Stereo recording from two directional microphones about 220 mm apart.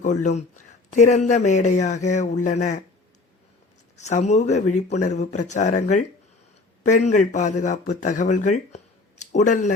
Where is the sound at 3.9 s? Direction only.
30° left (ahead or behind).